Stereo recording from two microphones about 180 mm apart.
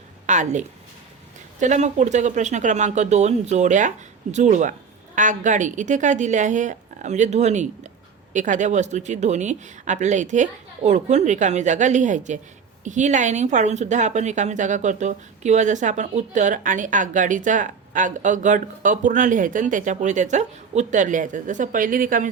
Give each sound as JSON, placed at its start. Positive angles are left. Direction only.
{"t": 0.3, "sound": "a woman's voice", "side_deg": -40}